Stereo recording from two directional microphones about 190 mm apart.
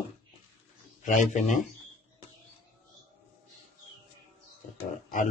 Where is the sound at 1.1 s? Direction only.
40° left (ahead or behind).